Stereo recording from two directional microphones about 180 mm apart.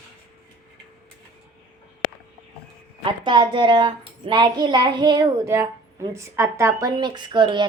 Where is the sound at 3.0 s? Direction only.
25° right (ahead or behind).